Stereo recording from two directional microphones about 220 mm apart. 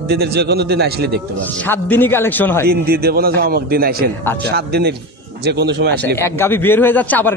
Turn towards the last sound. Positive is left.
turn(degrees=5)  # may be behind; listen again after turning